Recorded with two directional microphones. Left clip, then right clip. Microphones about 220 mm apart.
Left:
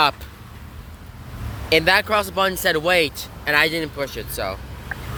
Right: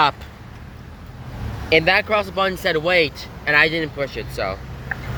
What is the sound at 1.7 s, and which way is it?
Speech, 20° left (ahead or behind).